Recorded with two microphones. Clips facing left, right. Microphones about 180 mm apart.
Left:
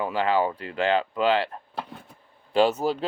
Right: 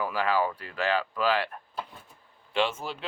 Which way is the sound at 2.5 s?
40° left (ahead or behind).